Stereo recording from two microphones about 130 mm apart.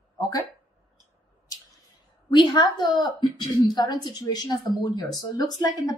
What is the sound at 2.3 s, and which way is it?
Speech, 35° left (ahead or behind).